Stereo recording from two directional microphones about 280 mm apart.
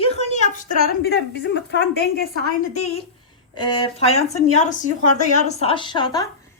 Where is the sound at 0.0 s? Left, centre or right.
Left.